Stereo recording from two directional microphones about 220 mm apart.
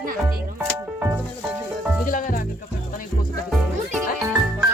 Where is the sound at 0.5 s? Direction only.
10° right (ahead or behind).